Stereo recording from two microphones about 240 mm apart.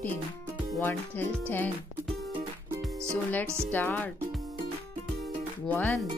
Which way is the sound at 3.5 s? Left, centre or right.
Centre.